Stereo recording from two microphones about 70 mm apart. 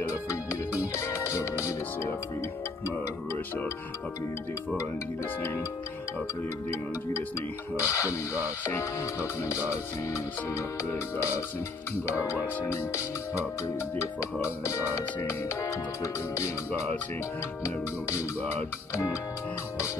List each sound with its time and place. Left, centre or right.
0.0 s music: left
7.8 s music: left
12.7 s music: left
15.6 s music: left